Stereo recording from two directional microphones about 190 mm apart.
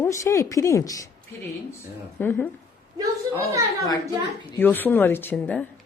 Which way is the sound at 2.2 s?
10° left (ahead or behind).